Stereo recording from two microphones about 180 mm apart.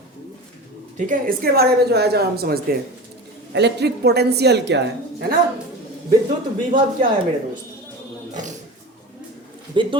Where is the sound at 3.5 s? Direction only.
70° right (ahead or behind).